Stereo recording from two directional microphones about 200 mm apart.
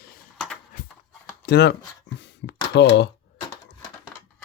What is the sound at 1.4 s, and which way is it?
Speech, 55° left (ahead or behind).